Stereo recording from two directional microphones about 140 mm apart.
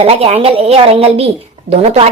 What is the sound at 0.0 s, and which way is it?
A woman's voice, 45° right (ahead or behind).